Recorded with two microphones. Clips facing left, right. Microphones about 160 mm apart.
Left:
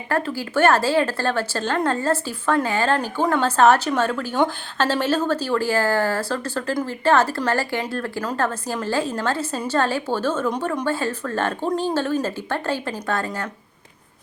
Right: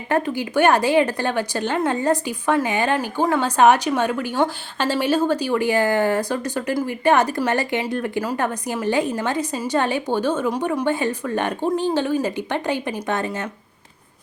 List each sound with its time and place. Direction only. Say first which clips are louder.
0.1 s speech: right 2 dB; 15° right (ahead or behind)